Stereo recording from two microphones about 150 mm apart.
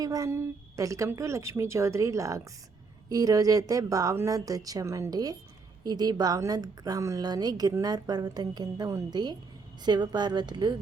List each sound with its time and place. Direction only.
0.0 s a woman's voice: 25° right (ahead or behind)